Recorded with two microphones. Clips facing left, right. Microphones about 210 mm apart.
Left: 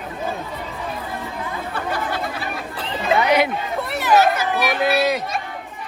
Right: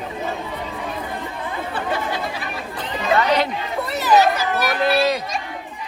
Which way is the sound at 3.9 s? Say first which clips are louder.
Right 1 dB; centre (ahead or behind).